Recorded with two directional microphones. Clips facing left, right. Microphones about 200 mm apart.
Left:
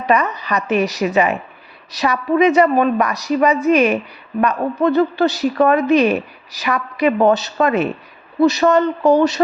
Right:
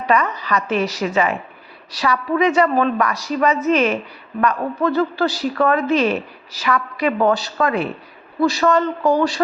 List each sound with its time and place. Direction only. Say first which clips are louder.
0.0 s a woman's voice: left 2 dB; 20° left (ahead or behind)